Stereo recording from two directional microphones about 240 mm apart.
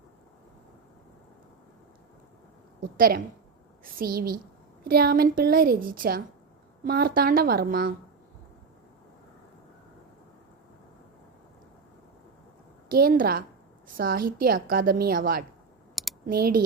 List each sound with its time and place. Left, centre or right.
3.9 s a woman's voice: right
12.9 s a woman's voice: right